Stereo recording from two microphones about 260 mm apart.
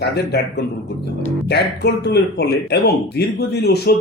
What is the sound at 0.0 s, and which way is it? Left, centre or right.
Speech, left.